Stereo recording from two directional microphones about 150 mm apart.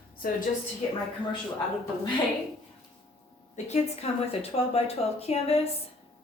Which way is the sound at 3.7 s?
45° left (ahead or behind).